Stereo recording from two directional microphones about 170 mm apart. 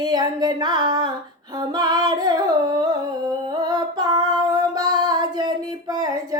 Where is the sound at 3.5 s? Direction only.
25° right (ahead or behind).